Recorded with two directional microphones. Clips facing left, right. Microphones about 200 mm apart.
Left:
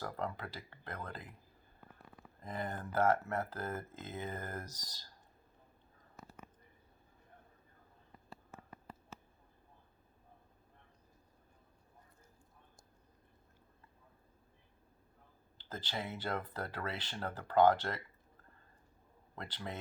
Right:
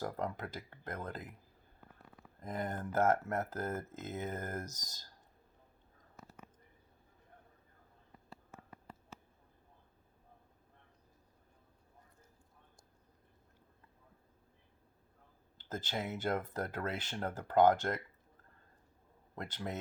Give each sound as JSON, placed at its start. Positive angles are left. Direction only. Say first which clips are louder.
{"t": 0.0, "sound": "speech", "louder": "right 2 dB", "side_deg": -45}
{"t": 2.4, "sound": "speech", "louder": "right 2 dB", "side_deg": -45}
{"t": 15.5, "sound": "speech", "louder": "right 3 dB", "side_deg": -45}
{"t": 19.4, "sound": "speech", "louder": "right 3 dB", "side_deg": -45}